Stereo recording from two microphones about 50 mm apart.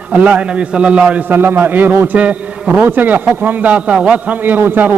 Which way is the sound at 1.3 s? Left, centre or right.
Right.